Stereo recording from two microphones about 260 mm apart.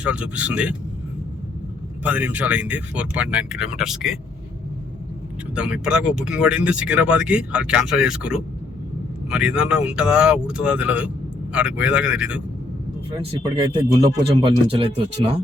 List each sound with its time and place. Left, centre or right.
0.0 s speech: centre
2.0 s speech: centre
5.5 s speech: centre
13.1 s speech: centre